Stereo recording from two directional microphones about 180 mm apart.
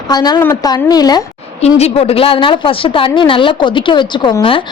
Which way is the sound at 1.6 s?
35° left (ahead or behind).